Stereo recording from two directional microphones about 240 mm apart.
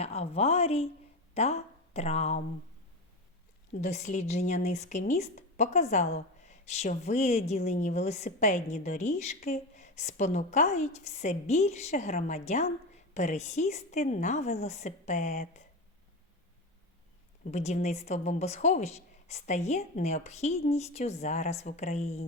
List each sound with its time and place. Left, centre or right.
0.0 s speech: left
3.8 s speech: left
17.4 s speech: left